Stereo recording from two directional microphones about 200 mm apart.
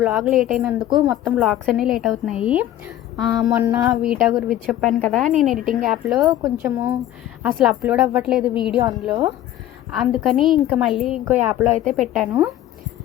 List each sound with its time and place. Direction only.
0.0 s a woman's voice: centre (ahead or behind)
0.9 s speech: 20° right (ahead or behind)
1.1 s a woman's voice: centre (ahead or behind)
6.7 s a woman's voice: 15° right (ahead or behind)
7.4 s a woman's voice: 5° right (ahead or behind)
10.2 s a woman's voice: centre (ahead or behind)